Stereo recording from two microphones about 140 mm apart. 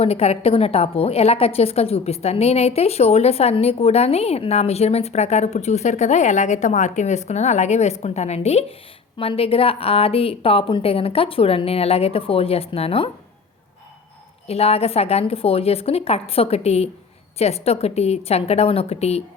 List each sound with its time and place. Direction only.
0.0 s a woman's voice: 45° left (ahead or behind)
14.4 s a woman's voice: 45° left (ahead or behind)